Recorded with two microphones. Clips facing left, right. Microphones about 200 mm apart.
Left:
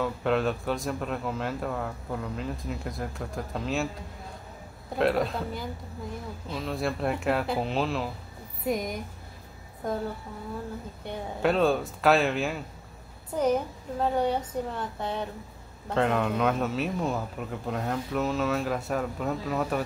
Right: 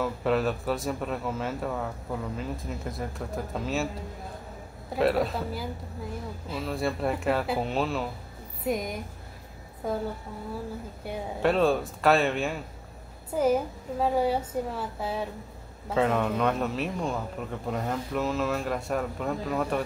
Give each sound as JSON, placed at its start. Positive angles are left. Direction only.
{"t": 0.0, "sound": "speech", "side_deg": 0}
{"t": 4.9, "sound": "speech", "side_deg": 0}
{"t": 11.1, "sound": "speech", "side_deg": 0}